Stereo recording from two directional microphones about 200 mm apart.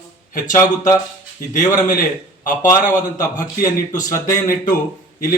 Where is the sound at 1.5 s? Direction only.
40° left (ahead or behind).